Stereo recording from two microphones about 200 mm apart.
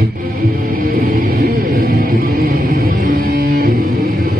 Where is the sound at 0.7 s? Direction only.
45° right (ahead or behind).